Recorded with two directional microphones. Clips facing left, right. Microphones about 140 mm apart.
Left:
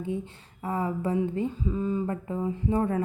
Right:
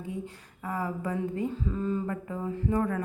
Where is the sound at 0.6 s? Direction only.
25° left (ahead or behind).